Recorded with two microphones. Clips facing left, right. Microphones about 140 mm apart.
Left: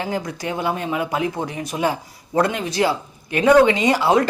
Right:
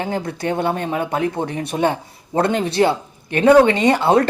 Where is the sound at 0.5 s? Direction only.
50° right (ahead or behind).